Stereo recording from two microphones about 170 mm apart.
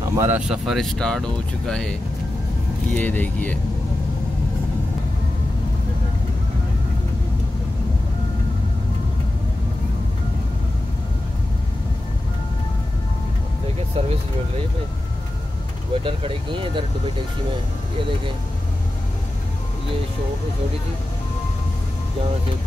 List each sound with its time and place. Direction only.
0.1 s speech: 15° right (ahead or behind)
0.4 s speech: 5° right (ahead or behind)
15.9 s speech: 30° right (ahead or behind)